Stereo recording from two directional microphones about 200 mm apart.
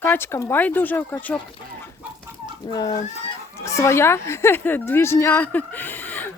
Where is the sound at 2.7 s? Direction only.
20° left (ahead or behind).